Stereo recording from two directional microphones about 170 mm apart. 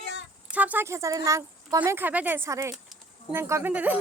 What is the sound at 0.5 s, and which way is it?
Speech, 10° right (ahead or behind).